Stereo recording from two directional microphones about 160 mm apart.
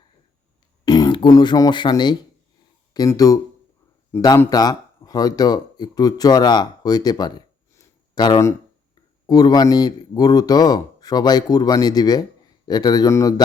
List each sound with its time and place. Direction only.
0.9 s a man's voice: 25° left (ahead or behind)